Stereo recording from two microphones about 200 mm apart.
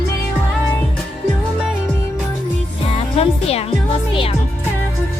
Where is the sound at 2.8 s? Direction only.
30° left (ahead or behind).